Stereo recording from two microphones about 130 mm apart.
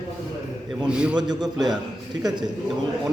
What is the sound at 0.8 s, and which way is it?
Speech, 5° right (ahead or behind).